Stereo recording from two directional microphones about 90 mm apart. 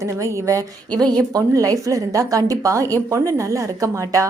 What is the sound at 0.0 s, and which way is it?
A woman's voice, 35° right (ahead or behind).